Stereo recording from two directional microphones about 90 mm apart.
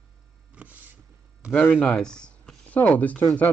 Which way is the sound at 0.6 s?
15° right (ahead or behind).